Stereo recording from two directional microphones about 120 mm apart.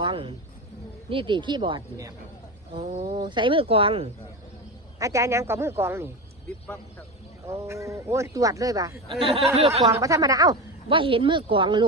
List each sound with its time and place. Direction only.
0.0 s speech: 45° right (ahead or behind)
2.9 s speech: 75° right (ahead or behind)
3.2 s speech: 40° right (ahead or behind)
4.9 s speech: 25° right (ahead or behind)
7.4 s speech: 25° right (ahead or behind)
9.2 s speech: 55° right (ahead or behind)
9.8 s speech: 30° right (ahead or behind)
10.8 s speech: 45° right (ahead or behind)